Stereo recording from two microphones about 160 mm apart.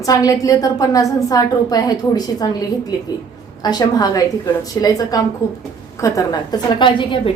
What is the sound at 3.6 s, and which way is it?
A woman's voice, 25° left (ahead or behind).